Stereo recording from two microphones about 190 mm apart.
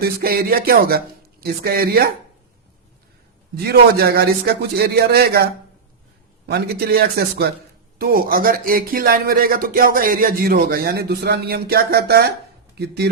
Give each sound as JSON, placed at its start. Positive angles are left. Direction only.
{"t": 0.0, "sound": "speech", "side_deg": -50}
{"t": 3.5, "sound": "a man's voice", "side_deg": -55}
{"t": 6.5, "sound": "a man's voice", "side_deg": -55}